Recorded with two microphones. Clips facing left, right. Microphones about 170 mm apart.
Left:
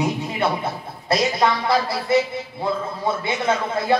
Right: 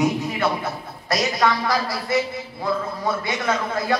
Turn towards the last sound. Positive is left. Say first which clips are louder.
# left 2 dB
turn(degrees=25)  # may be behind; listen again after turning